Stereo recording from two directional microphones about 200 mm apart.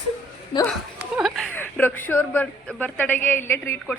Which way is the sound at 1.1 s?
Centre (ahead or behind).